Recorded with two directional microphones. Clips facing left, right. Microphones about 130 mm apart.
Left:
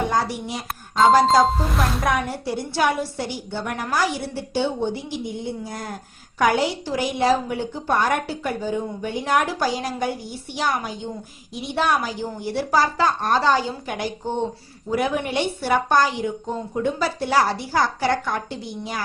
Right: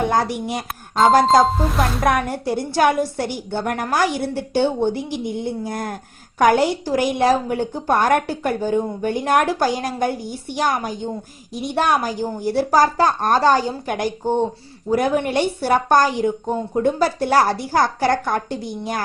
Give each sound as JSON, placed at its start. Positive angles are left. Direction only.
{"t": 0.1, "sound": "a woman's voice", "side_deg": -55}